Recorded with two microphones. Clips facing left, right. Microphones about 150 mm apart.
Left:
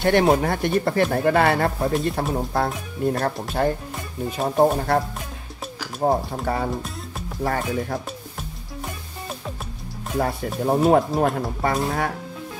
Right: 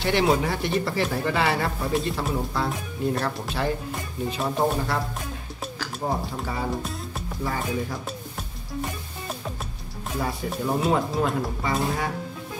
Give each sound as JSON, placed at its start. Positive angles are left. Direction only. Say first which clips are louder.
{"t": 0.0, "sound": "speech", "louder": "left 4 dB", "side_deg": 50}
{"t": 6.0, "sound": "speech", "louder": "left 7 dB", "side_deg": 55}
{"t": 6.7, "sound": "music", "louder": "even", "side_deg": 0}
{"t": 7.4, "sound": "speech", "louder": "left 4 dB", "side_deg": 60}
{"t": 10.1, "sound": "speech", "louder": "left 5 dB", "side_deg": 50}